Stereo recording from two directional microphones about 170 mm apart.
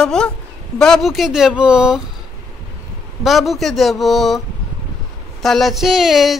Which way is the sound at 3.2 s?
Centre (ahead or behind).